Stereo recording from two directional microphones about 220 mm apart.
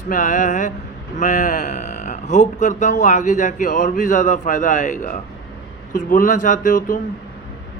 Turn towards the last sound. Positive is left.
turn(degrees=35)  # may be behind; listen again after turning